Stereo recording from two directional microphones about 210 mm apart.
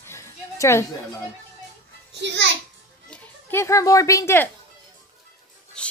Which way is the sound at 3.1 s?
10° left (ahead or behind).